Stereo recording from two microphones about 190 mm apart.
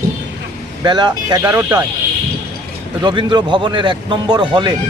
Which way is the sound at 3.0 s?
25° right (ahead or behind).